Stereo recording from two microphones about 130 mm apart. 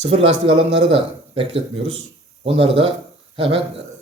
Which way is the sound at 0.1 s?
45° right (ahead or behind).